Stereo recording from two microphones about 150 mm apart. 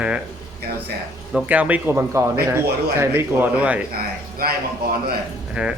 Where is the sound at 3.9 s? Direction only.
90° right.